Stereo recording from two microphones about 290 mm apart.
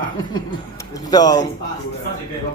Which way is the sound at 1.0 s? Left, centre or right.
Centre.